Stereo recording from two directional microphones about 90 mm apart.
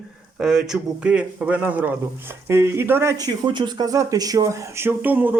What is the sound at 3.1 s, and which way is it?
Speech, 50° right (ahead or behind).